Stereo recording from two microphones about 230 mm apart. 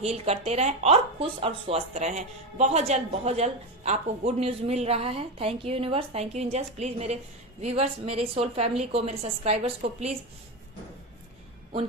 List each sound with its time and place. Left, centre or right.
0.0 s speech: right